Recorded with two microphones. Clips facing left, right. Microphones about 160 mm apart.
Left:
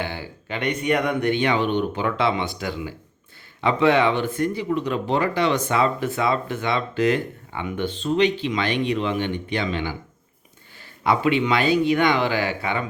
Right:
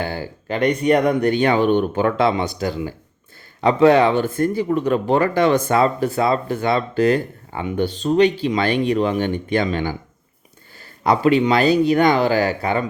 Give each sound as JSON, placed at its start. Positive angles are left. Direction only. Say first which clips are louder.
{"t": 0.0, "sound": "speech", "louder": "right 4 dB", "side_deg": -40}
{"t": 11.0, "sound": "speech", "louder": "right 5 dB", "side_deg": -40}